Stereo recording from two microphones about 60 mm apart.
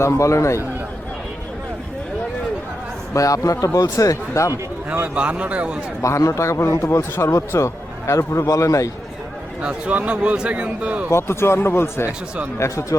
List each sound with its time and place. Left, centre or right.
0.0 s a man's voice: left
3.1 s speech: left
5.0 s speech: right
6.0 s a man's voice: left
9.6 s speech: right
11.1 s speech: left
12.5 s a man's voice: left